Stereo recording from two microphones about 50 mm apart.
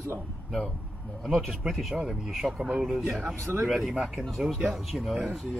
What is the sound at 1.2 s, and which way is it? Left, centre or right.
Speech, centre.